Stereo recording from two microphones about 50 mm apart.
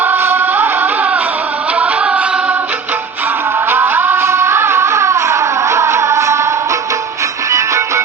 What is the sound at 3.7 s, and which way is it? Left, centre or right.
Music, right.